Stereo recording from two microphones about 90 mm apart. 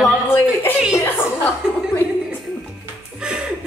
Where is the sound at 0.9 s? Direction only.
30° left (ahead or behind).